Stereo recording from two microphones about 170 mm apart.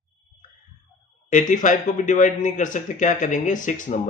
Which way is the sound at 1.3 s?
50° left (ahead or behind).